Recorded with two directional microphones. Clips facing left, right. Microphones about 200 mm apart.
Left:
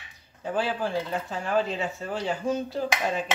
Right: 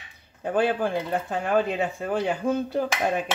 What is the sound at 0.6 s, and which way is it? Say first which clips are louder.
Cutlery: right 4 dB; 55° right (ahead or behind).